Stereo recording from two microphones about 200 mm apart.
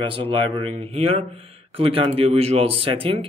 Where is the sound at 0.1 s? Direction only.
25° right (ahead or behind).